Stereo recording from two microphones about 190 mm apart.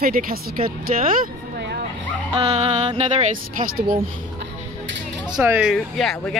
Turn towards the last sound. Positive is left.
turn(degrees=0)  # may be behind; listen again after turning